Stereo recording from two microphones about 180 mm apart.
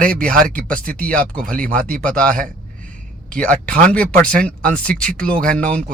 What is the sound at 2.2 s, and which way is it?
Speech, 50° right (ahead or behind).